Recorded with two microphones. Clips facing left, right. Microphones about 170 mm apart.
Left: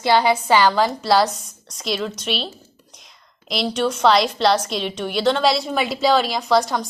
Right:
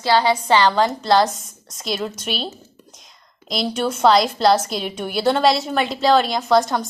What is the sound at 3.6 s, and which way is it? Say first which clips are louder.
A woman's voice: right 1 dB; 5° right (ahead or behind).